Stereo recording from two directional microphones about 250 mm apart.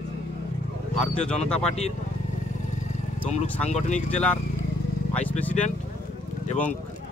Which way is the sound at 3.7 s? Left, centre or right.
Left.